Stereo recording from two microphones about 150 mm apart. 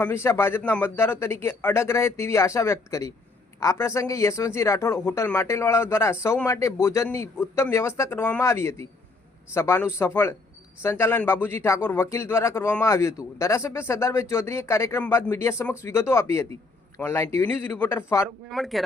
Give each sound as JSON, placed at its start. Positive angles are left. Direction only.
{"t": 0.0, "sound": "speech", "side_deg": 15}
{"t": 18.4, "sound": "speech", "side_deg": 0}